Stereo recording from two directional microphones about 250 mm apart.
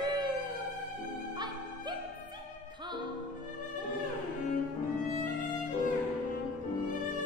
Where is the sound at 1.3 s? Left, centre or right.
Centre.